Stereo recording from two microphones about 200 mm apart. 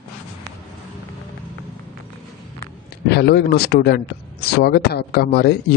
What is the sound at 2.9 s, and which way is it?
Speech, 55° left (ahead or behind).